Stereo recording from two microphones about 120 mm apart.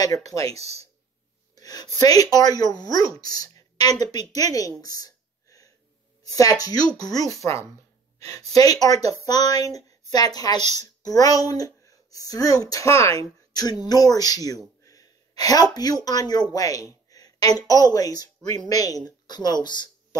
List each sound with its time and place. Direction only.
0.0 s speech: 30° left (ahead or behind)
0.5 s speech: 60° right (ahead or behind)
1.5 s a sound: 30° left (ahead or behind)
2.0 s a woman's voice: 30° left (ahead or behind)